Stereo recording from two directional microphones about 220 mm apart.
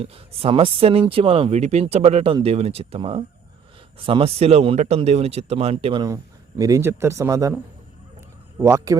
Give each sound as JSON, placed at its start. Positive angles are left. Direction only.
{"t": 0.0, "sound": "speech", "side_deg": -25}